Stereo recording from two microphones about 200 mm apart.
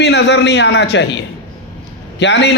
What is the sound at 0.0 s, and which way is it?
A man's voice, 55° left (ahead or behind).